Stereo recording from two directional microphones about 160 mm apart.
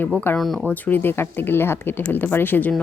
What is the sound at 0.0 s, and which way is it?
Speech, 10° left (ahead or behind).